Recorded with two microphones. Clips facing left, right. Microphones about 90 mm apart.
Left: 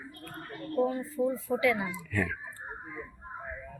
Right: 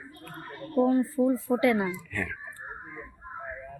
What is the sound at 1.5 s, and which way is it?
Speech, 50° right (ahead or behind).